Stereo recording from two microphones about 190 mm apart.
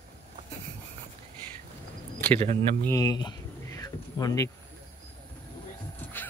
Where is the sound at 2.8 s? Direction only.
20° left (ahead or behind).